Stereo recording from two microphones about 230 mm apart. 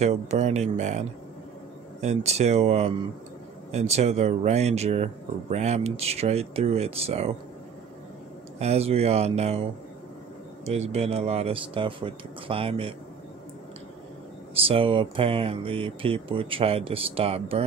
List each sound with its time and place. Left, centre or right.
0.0 s speech: right
8.5 s speech: right
10.6 s speech: right
14.5 s speech: right